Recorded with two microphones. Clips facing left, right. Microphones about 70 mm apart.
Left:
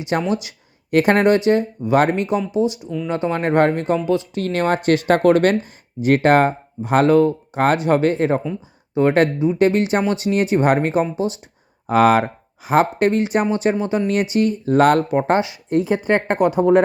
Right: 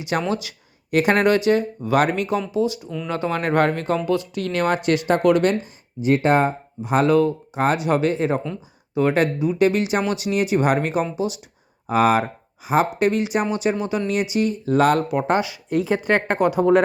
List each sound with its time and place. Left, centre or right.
0.0 s speech: left
0.9 s speech: left
1.2 s speech: left
4.4 s speech: left
7.1 s speech: left
11.9 s speech: left
15.3 s speech: left